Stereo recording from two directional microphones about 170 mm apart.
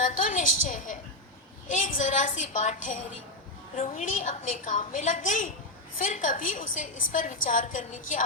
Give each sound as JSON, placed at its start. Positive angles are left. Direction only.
{"t": 0.0, "sound": "a woman's voice", "side_deg": 50}